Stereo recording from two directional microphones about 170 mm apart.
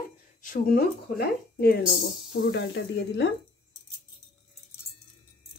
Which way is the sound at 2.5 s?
90° left.